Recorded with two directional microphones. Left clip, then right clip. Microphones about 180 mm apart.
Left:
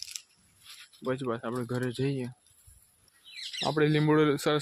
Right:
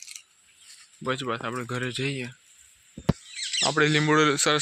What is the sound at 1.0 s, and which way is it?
Speech, 15° left (ahead or behind).